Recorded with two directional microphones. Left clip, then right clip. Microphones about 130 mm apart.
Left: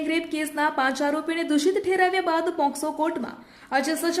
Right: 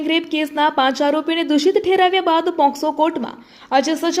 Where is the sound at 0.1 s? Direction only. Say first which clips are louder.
Right 10 dB; 30° right (ahead or behind).